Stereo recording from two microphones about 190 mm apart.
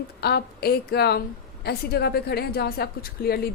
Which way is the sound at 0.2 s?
55° left (ahead or behind).